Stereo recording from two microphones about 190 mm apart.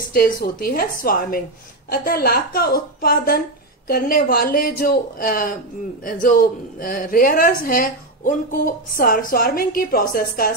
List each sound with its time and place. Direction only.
0.1 s a woman's voice: 50° left (ahead or behind)